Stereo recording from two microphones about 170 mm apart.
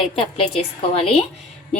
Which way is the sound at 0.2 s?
35° left (ahead or behind).